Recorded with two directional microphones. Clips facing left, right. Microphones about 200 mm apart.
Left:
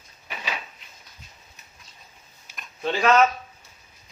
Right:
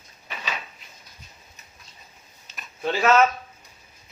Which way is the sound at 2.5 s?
5° right (ahead or behind).